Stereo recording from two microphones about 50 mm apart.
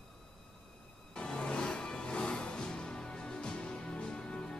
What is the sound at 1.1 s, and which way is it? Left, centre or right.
Music, centre.